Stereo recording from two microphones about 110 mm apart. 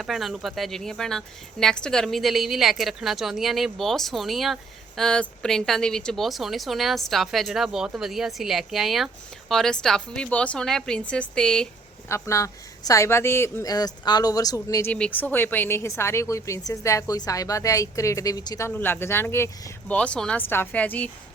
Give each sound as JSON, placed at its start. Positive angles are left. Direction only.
{"t": 0.0, "sound": "a woman's voice", "side_deg": 0}
{"t": 12.0, "sound": "a woman's voice", "side_deg": 25}
{"t": 13.7, "sound": "speech", "side_deg": 35}
{"t": 14.8, "sound": "a woman's voice", "side_deg": 15}
{"t": 18.7, "sound": "a woman's voice", "side_deg": 20}
{"t": 19.9, "sound": "a woman's voice", "side_deg": 10}